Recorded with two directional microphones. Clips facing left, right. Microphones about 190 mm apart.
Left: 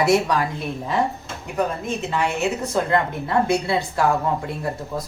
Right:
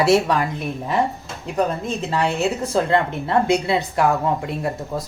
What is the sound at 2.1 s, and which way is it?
Speech, 35° right (ahead or behind).